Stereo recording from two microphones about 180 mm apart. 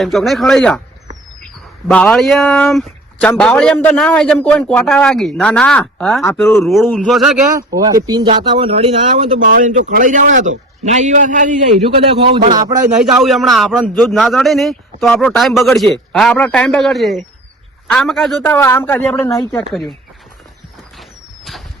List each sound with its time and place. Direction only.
0.0 s a man's voice: centre (ahead or behind)
1.9 s a man's voice: 5° left (ahead or behind)
7.5 s speech: 20° right (ahead or behind); by 11.5 s 45° right (ahead or behind)
12.2 s speech: 30° right (ahead or behind)
13.1 s a man's voice: centre (ahead or behind)
18.4 s speech: 15° left (ahead or behind)
21.0 s a sound: centre (ahead or behind)